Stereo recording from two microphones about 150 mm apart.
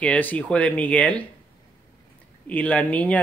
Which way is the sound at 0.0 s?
10° left (ahead or behind).